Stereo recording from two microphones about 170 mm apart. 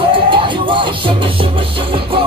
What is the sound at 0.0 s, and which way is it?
Music, 30° right (ahead or behind).